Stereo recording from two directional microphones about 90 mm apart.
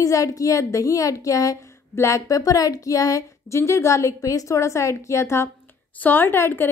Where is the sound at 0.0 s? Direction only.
40° left (ahead or behind).